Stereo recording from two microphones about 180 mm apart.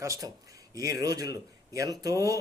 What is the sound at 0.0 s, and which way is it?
Speech, 20° right (ahead or behind).